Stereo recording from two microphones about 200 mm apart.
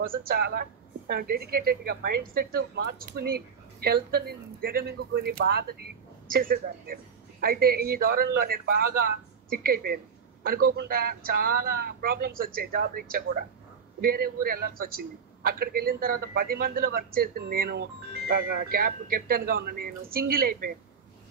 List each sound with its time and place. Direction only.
0.0 s a woman's voice: 45° right (ahead or behind)